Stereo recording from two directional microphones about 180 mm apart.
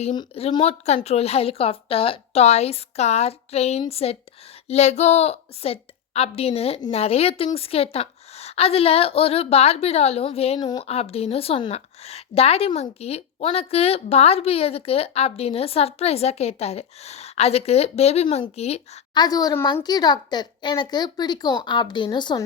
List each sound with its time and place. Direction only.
0.0 s a woman's voice: 30° left (ahead or behind)
19.1 s a woman's voice: 20° left (ahead or behind)